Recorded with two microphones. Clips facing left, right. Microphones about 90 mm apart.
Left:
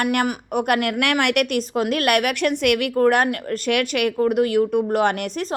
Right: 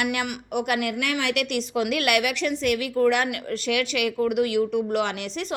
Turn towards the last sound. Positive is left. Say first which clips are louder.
# left 6 dB
turn(degrees=40)  # may be behind; listen again after turning